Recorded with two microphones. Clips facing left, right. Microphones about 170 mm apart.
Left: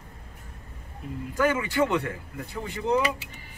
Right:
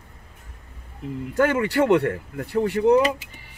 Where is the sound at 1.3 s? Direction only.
60° right (ahead or behind).